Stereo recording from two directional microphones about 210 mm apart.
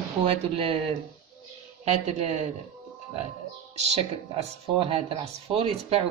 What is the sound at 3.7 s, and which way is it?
Speech, 30° right (ahead or behind).